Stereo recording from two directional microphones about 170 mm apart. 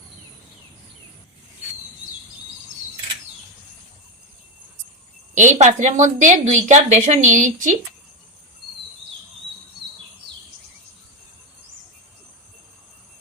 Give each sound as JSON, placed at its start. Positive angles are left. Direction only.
{"t": 5.3, "sound": "a woman's voice", "side_deg": -45}